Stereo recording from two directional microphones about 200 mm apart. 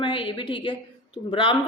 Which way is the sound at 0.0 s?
25° left (ahead or behind).